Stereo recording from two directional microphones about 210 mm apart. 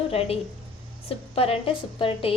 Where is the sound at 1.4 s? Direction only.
25° left (ahead or behind).